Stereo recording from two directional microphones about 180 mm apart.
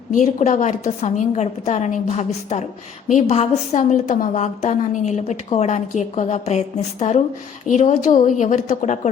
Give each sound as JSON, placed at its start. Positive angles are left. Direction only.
{"t": 0.1, "sound": "a woman's voice", "side_deg": 45}